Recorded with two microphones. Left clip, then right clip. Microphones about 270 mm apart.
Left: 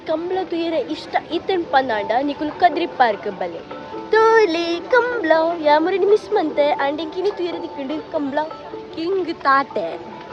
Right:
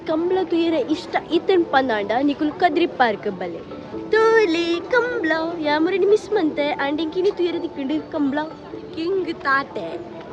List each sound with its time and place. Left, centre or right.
0.1 s a woman's voice: centre
4.1 s a sound: centre
9.0 s a woman's voice: centre